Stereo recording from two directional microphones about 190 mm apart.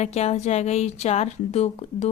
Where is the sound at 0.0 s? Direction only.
35° left (ahead or behind).